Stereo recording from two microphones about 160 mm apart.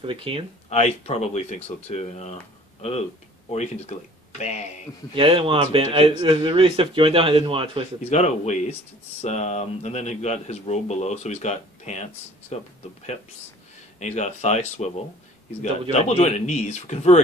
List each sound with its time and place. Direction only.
0.0 s a man's voice: 35° right (ahead or behind)
0.7 s speech: 40° left (ahead or behind)
3.5 s speech: 45° left (ahead or behind)
5.1 s a man's voice: 35° right (ahead or behind)
8.0 s speech: 45° left (ahead or behind)
13.9 s speech: 45° left (ahead or behind)
15.9 s speech: 45° left (ahead or behind)